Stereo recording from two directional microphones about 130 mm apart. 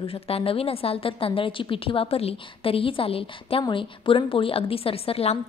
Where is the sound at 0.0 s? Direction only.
45° left (ahead or behind).